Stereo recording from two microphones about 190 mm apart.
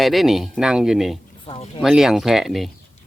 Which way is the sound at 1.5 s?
30° left (ahead or behind).